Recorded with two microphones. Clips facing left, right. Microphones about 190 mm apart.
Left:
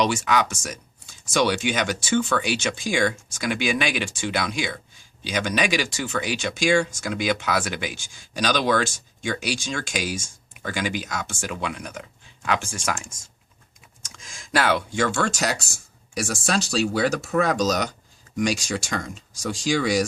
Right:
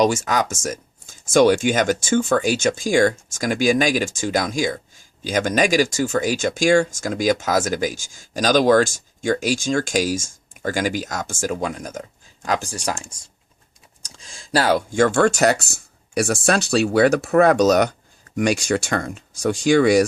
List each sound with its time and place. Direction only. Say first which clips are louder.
0.0 s speech: right 3 dB; 45° right (ahead or behind)